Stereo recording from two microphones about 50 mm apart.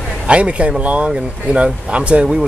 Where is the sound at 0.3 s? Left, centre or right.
Right.